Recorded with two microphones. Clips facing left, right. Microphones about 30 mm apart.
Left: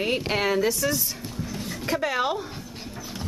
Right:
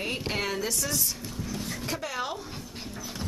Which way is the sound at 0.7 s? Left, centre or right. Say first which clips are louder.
Left 6 dB; centre.